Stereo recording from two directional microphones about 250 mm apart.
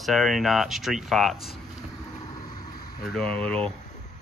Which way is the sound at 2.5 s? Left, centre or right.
Centre.